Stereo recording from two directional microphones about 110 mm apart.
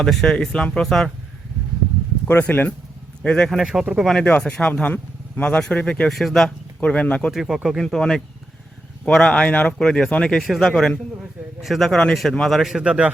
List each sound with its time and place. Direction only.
0.0 s speech: 5° left (ahead or behind)
2.2 s speech: 15° left (ahead or behind); by 4.1 s 5° right (ahead or behind)
4.1 s speech: 15° left (ahead or behind)
7.3 s speech: centre (ahead or behind)